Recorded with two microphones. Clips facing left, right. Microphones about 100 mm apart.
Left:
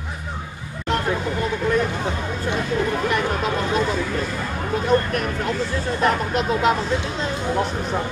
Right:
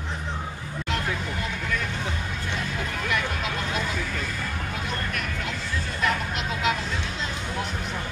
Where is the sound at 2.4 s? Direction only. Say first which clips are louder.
Left 11 dB; 40° left (ahead or behind).